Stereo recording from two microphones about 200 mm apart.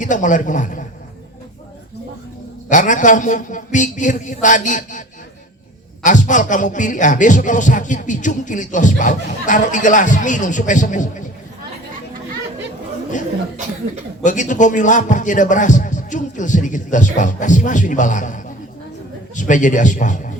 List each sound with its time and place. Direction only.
0.0 s a man's voice: 40° left (ahead or behind)
2.6 s a man's voice: 40° left (ahead or behind)
14.3 s a man's voice: 40° left (ahead or behind)
19.4 s a man's voice: 40° left (ahead or behind)